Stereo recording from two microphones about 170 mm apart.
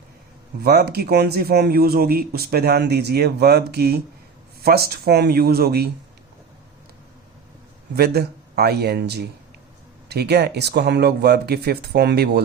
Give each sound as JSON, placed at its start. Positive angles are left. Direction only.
{"t": 0.6, "sound": "speech", "side_deg": -70}
{"t": 7.9, "sound": "speech", "side_deg": -70}